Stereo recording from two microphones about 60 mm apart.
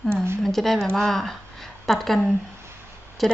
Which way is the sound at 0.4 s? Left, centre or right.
Centre.